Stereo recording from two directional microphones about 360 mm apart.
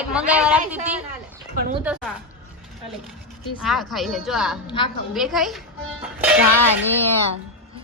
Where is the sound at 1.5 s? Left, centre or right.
Right.